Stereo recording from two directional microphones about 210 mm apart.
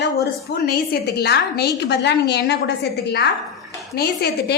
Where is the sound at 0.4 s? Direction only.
50° left (ahead or behind).